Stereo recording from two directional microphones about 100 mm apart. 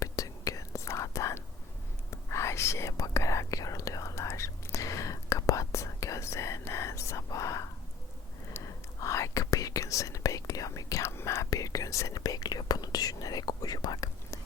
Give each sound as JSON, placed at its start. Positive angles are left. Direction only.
{"t": 0.0, "sound": "whispering", "side_deg": 35}